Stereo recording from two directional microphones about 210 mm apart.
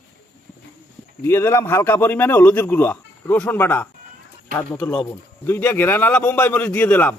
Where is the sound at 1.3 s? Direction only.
10° left (ahead or behind).